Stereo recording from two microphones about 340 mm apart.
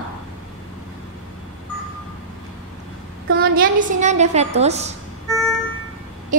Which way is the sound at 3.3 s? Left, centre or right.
Right.